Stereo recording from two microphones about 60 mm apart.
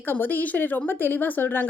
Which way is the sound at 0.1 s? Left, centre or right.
Left.